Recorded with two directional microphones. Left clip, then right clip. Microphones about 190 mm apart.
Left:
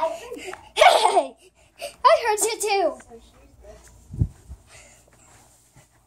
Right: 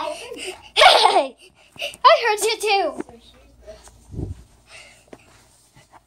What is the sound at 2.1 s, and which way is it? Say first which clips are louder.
Speech: right 2 dB; 15° right (ahead or behind).